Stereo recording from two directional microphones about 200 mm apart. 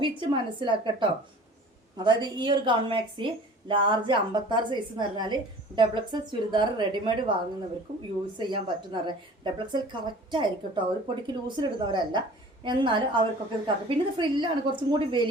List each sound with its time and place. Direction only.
0.0 s a woman's voice: 25° right (ahead or behind)
8.4 s a woman's voice: 20° right (ahead or behind)